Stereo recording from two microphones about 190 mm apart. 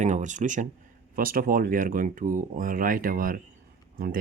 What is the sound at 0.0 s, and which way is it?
Speech, 40° right (ahead or behind).